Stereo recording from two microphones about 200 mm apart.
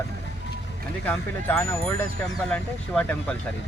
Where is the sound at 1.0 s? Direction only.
10° left (ahead or behind).